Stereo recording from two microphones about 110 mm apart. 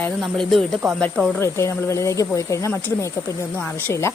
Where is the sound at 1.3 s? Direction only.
25° left (ahead or behind).